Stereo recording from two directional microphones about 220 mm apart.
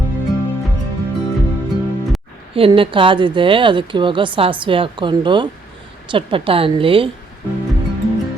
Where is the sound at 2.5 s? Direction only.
25° right (ahead or behind).